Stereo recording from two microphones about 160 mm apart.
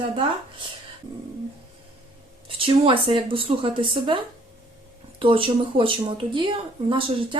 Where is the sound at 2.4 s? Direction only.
35° right (ahead or behind).